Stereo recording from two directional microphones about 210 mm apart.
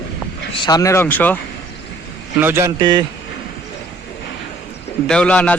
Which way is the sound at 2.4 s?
10° right (ahead or behind).